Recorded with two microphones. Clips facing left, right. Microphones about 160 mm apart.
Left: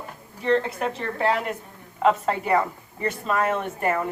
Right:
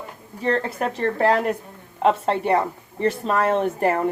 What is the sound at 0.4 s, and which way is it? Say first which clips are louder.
Speech: even; 40° right (ahead or behind).